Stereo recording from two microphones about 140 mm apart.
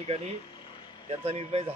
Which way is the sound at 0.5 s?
40° left (ahead or behind).